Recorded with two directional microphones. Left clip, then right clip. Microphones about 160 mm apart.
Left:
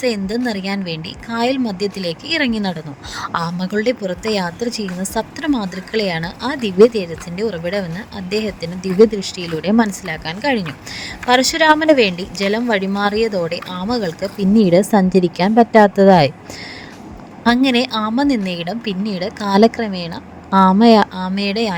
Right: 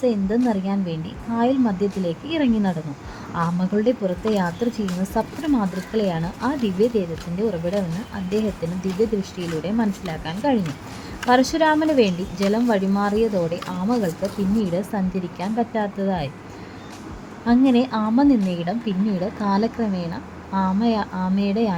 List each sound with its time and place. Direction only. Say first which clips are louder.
0.0 s a woman's voice: left 2 dB; 55° left (ahead or behind)
17.4 s a woman's voice: left 4 dB; 50° left (ahead or behind)